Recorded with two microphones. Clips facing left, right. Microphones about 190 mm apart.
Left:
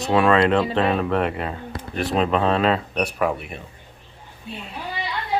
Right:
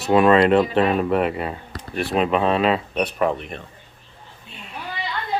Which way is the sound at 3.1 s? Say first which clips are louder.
Right 1 dB; 10° left (ahead or behind).